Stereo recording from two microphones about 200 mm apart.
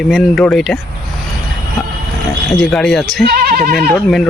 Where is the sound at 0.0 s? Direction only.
Centre (ahead or behind).